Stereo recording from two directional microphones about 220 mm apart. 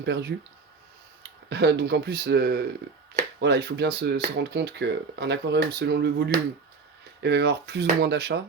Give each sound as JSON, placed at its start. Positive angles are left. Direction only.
{"t": 0.0, "sound": "speech", "side_deg": -50}
{"t": 1.5, "sound": "speech", "side_deg": -50}